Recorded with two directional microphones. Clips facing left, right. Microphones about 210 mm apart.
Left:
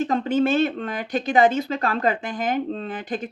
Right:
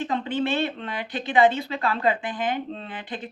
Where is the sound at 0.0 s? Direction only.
45° left (ahead or behind).